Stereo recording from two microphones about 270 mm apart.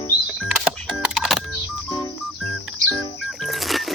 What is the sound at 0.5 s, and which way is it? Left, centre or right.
Music, centre.